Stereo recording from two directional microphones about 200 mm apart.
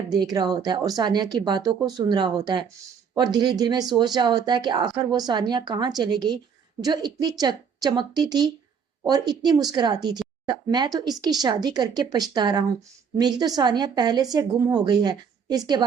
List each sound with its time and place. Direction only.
0.1 s speech: 20° right (ahead or behind)